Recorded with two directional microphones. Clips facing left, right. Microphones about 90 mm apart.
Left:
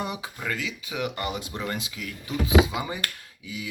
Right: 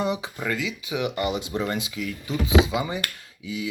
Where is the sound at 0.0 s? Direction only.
25° right (ahead or behind).